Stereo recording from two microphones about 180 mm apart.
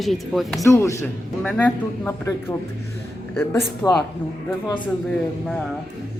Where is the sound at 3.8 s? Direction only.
5° left (ahead or behind).